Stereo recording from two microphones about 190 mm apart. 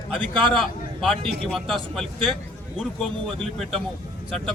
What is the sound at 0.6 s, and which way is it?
Speech, centre (ahead or behind).